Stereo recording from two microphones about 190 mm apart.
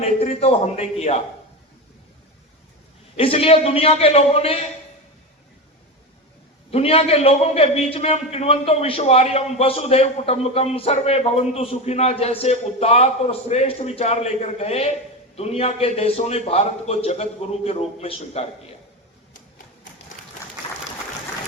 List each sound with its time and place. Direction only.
0.0 s a man's voice: 30° left (ahead or behind)
3.2 s a man's voice: 30° left (ahead or behind)
6.7 s a man's voice: 30° left (ahead or behind)
20.6 s applause: 30° left (ahead or behind)